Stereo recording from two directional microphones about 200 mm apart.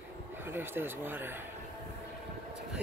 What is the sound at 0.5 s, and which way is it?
Speech, 10° right (ahead or behind).